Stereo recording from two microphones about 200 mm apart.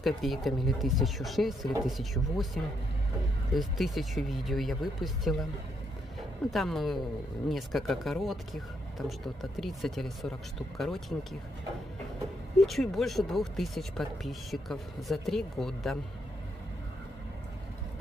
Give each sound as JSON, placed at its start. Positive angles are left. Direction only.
{"t": 0.0, "sound": "speech", "side_deg": 0}
{"t": 6.5, "sound": "speech", "side_deg": 0}
{"t": 12.5, "sound": "speech", "side_deg": 0}